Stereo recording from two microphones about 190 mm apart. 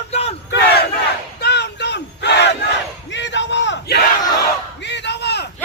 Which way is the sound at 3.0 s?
70° left (ahead or behind).